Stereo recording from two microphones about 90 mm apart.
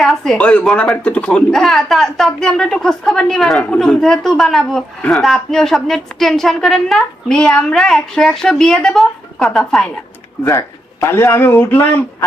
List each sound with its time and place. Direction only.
0.0 s speech: centre (ahead or behind)
0.3 s a woman's voice: 15° left (ahead or behind)
10.4 s a man's voice: 35° left (ahead or behind)